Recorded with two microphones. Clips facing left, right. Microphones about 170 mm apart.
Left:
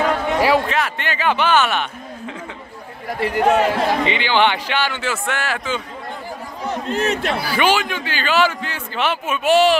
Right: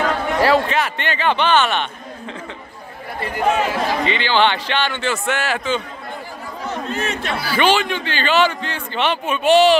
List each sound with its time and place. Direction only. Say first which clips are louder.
0.0 s a sound: even; 10° left (ahead or behind)
0.7 s a man's voice: right 1 dB; centre (ahead or behind)
3.2 s a man's voice: left 4 dB; 90° left
4.0 s a man's voice: even; 15° left (ahead or behind); by 5.8 s centre (ahead or behind)
7.0 s a man's voice: left 6 dB; 40° left (ahead or behind)
7.4 s a man's voice: right 3 dB; 10° left (ahead or behind)